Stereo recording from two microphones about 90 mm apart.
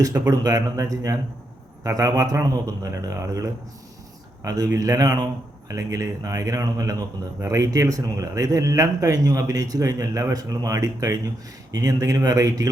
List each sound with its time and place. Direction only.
0.0 s a man's voice: 40° right (ahead or behind)